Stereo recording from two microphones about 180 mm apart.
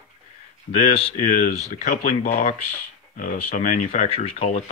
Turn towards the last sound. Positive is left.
turn(degrees=35)  # may be behind; listen again after turning